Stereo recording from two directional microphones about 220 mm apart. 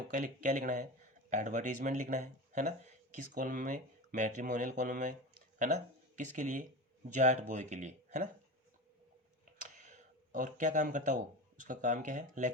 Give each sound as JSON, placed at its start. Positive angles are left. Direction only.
{"t": 0.1, "sound": "speech", "side_deg": -35}
{"t": 9.6, "sound": "a sound", "side_deg": -35}
{"t": 11.6, "sound": "speech", "side_deg": -35}